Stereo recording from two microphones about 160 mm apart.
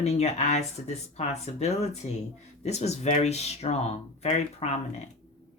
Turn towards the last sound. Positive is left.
turn(degrees=45)  # may be behind; listen again after turning